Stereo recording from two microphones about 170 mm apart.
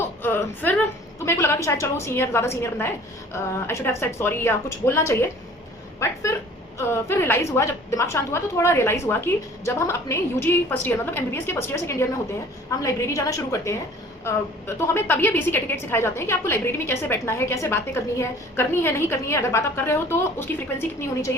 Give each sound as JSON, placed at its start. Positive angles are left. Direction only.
{"t": 0.2, "sound": "a sound", "side_deg": 10}
{"t": 1.2, "sound": "a woman's voice", "side_deg": 15}
{"t": 14.8, "sound": "a woman's voice", "side_deg": 15}